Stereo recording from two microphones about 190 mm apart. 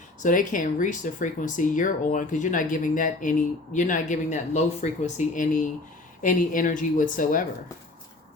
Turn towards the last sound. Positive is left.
turn(degrees=45)  # may be behind; listen again after turning